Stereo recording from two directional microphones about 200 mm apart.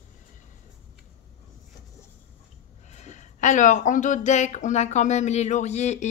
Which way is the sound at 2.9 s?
35° left (ahead or behind).